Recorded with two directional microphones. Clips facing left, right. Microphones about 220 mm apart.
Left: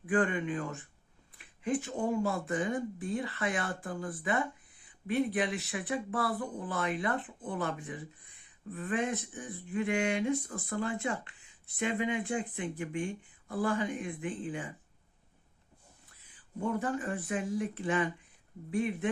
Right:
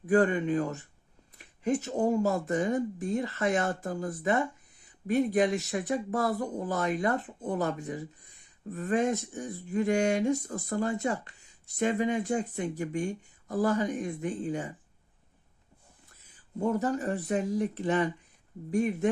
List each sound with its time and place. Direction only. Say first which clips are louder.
0.0 s speech: right 5 dB; 40° right (ahead or behind)
16.2 s speech: right 5 dB; 40° right (ahead or behind)